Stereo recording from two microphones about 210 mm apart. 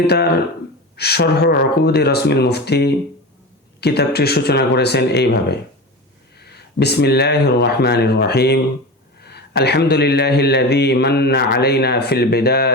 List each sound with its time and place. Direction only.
0.1 s speech: 50° left (ahead or behind)